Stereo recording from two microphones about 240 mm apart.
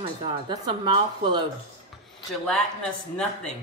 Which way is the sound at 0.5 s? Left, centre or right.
Centre.